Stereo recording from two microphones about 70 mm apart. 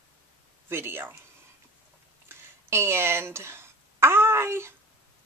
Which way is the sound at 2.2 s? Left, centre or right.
Right.